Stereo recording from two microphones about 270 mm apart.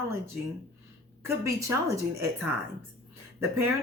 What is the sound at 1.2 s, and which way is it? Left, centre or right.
A woman's voice, centre.